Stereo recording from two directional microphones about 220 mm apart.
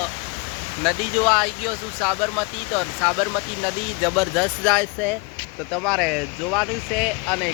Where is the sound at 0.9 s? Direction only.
5° left (ahead or behind).